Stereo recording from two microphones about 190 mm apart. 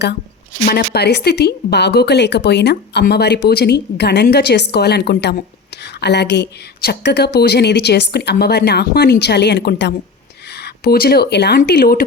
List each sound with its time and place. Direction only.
0.6 s speech: 50° left (ahead or behind)